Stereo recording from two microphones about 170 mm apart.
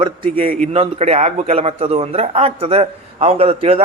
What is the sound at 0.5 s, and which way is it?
A man's voice, 45° right (ahead or behind).